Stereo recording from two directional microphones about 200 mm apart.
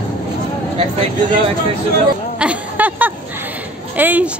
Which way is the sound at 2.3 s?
5° right (ahead or behind).